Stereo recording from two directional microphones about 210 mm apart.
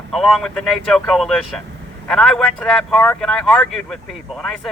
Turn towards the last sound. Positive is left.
turn(degrees=0)  # may be behind; listen again after turning